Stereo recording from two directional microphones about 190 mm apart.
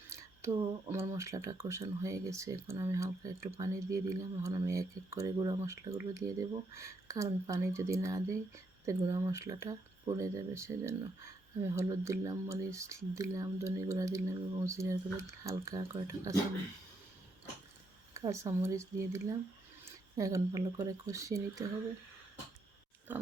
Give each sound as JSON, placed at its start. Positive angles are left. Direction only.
{"t": 0.1, "sound": "speech", "side_deg": -15}
{"t": 18.1, "sound": "speech", "side_deg": -15}
{"t": 23.1, "sound": "pig", "side_deg": -10}